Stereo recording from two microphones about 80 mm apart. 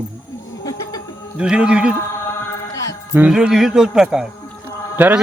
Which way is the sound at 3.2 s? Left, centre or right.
Centre.